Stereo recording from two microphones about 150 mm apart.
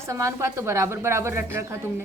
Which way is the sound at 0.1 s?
20° right (ahead or behind).